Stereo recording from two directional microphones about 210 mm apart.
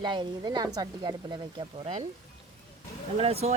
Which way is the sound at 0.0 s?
20° right (ahead or behind).